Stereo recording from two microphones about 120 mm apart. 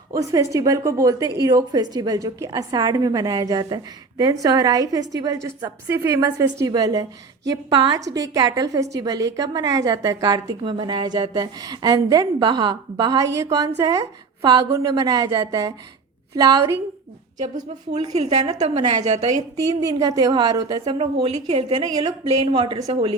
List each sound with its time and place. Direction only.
0.2 s a woman's voice: 30° right (ahead or behind)
18.2 s a woman's voice: 60° right (ahead or behind)
19.4 s a woman's voice: 30° right (ahead or behind)
22.9 s a woman's voice: 60° right (ahead or behind)